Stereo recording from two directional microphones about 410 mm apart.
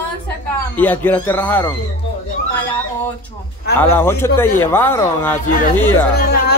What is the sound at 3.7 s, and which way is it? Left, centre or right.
Speech, centre.